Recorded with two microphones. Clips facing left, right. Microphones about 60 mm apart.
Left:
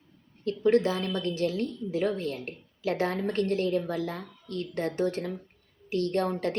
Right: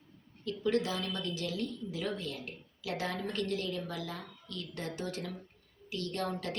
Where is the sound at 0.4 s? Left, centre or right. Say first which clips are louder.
Left 8 dB; left.